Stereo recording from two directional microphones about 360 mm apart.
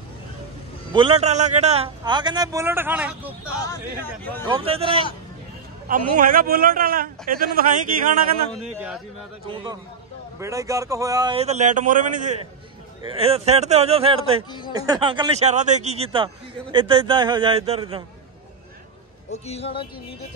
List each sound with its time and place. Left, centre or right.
0.9 s a man's voice: centre
3.6 s speech: centre
4.5 s a man's voice: centre
8.7 s a man's voice: centre
19.3 s speech: centre